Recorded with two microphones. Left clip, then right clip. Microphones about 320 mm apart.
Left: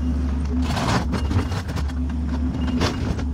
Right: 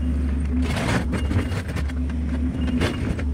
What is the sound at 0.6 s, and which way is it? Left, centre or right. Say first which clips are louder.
Vehicle: left 2 dB; centre.